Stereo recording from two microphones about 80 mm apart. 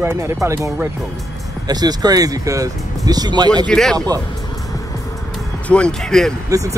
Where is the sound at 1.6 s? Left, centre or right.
Right.